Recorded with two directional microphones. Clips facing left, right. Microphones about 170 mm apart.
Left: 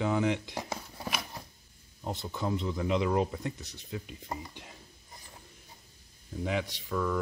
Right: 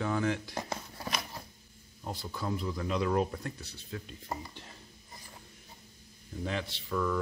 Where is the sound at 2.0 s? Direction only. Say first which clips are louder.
Left 3 dB; 20° left (ahead or behind).